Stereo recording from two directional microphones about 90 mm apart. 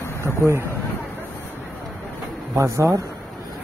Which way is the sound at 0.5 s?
30° right (ahead or behind).